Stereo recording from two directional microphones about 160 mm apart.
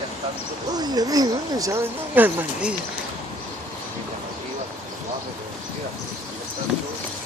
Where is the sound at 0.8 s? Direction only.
25° right (ahead or behind).